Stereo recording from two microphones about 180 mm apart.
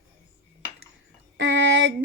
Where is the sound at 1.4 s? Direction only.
90° right.